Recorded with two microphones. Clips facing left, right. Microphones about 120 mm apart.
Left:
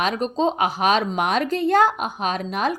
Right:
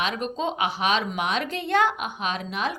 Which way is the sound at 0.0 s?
40° left (ahead or behind).